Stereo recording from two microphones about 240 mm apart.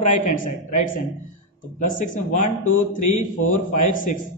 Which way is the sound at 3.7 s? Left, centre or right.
Left.